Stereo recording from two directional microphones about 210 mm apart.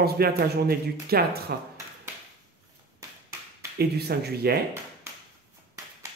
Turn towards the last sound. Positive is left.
turn(degrees=-50)  # may be behind; listen again after turning